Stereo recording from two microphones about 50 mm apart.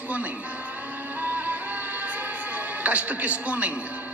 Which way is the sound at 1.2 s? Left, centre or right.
Right.